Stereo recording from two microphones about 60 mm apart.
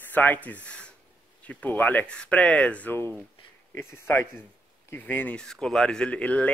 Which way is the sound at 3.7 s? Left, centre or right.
Left.